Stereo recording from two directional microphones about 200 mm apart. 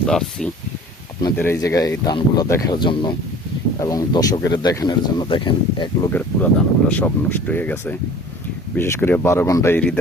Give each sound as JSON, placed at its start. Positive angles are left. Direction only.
{"t": 0.0, "sound": "speech", "side_deg": 5}
{"t": 1.2, "sound": "speech", "side_deg": 15}
{"t": 6.1, "sound": "speech", "side_deg": 5}